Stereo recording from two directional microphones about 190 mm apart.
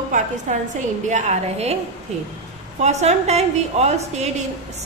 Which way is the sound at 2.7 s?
35° right (ahead or behind).